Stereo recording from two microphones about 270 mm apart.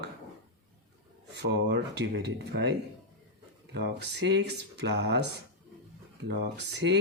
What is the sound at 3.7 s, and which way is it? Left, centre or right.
Speech, right.